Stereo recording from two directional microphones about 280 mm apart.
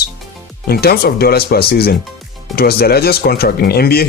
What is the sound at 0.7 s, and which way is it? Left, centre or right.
Speech, left.